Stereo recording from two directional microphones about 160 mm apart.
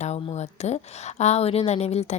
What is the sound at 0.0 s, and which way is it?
A woman's voice, 45° left (ahead or behind).